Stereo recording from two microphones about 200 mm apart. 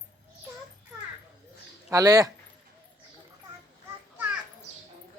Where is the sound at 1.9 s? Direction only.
15° right (ahead or behind).